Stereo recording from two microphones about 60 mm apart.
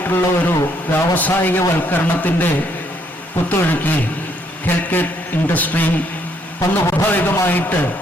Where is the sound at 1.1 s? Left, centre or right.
Left.